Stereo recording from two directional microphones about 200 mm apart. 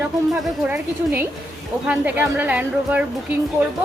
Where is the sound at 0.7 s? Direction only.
10° right (ahead or behind).